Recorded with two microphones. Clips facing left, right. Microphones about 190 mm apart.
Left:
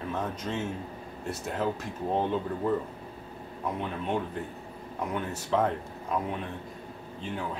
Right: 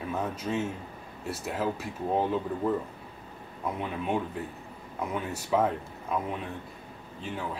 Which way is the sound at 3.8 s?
5° right (ahead or behind).